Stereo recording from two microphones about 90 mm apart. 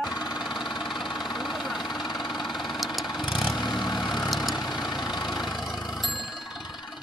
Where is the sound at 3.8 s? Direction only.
50° left (ahead or behind).